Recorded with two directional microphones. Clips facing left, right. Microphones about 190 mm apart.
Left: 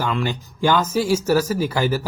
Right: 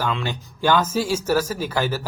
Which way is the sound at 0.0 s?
5° left (ahead or behind).